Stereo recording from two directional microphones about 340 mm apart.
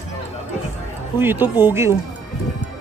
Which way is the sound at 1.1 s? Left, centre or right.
Centre.